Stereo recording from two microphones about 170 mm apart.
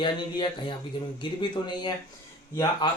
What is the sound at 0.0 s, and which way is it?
Speech, 30° left (ahead or behind).